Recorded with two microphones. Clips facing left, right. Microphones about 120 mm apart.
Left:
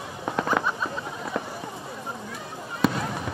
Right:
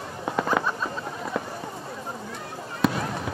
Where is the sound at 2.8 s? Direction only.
Centre (ahead or behind).